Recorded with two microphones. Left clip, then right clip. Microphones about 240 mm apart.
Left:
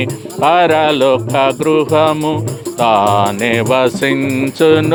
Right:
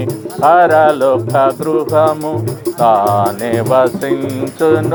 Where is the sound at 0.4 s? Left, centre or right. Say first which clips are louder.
Right 2 dB; left.